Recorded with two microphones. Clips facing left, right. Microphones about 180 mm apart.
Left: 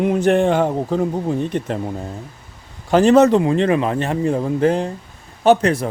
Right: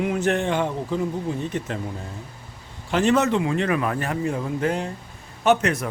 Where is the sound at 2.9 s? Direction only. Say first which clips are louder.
Left 8 dB; 35° left (ahead or behind).